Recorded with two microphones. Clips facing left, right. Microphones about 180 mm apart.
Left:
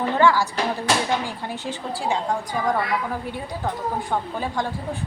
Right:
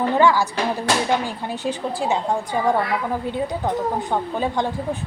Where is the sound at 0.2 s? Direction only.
15° right (ahead or behind).